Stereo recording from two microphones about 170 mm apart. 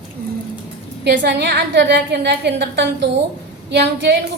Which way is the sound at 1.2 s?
90° right.